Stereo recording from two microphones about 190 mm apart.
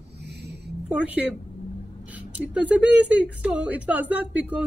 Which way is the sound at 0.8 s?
10° right (ahead or behind).